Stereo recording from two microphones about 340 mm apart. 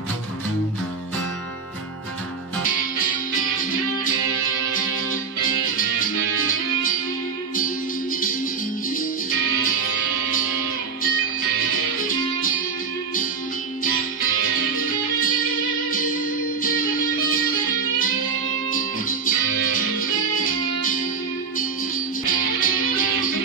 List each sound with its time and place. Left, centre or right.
12.4 s music: left
14.8 s music: left
16.6 s music: left
18.7 s music: left
22.2 s music: left